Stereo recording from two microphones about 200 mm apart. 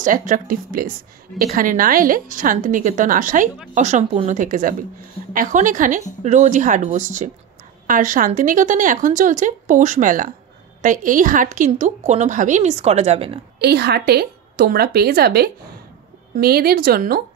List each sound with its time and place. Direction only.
0.0 s a woman's voice: 40° right (ahead or behind)
13.6 s a woman's voice: 55° right (ahead or behind)